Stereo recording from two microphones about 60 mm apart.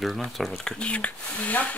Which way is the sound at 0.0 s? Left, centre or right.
Centre.